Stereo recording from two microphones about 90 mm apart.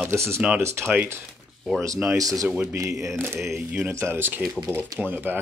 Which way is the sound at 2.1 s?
40° right (ahead or behind).